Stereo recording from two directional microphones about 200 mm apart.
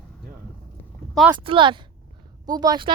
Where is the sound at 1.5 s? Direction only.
25° right (ahead or behind).